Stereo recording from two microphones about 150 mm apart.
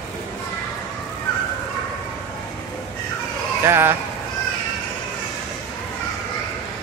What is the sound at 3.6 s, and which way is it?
Speech, 15° right (ahead or behind).